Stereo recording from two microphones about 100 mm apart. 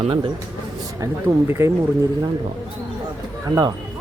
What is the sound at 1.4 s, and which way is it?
Speech, 25° right (ahead or behind).